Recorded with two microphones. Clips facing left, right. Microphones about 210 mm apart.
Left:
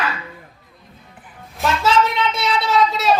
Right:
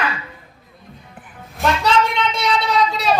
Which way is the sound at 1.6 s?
Centre (ahead or behind).